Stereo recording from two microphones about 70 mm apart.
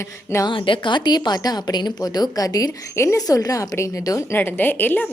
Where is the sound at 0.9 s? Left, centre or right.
Left.